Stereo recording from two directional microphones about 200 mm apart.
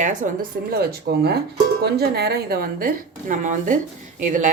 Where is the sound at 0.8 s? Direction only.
50° right (ahead or behind).